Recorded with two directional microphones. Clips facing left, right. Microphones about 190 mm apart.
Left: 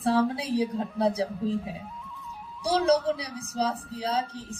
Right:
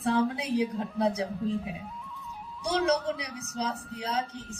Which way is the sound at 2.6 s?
30° left (ahead or behind).